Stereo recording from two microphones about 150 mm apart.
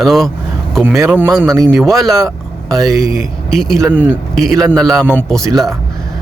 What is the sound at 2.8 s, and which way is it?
Speech, 20° right (ahead or behind).